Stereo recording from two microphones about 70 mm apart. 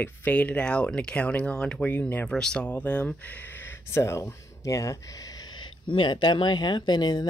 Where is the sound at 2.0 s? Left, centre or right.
Left.